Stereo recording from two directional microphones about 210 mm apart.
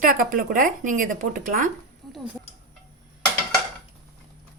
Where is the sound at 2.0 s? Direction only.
Centre (ahead or behind).